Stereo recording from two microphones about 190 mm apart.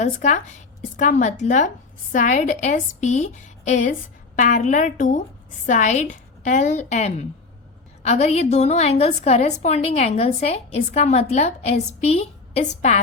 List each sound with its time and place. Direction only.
0.0 s a woman's voice: 40° left (ahead or behind)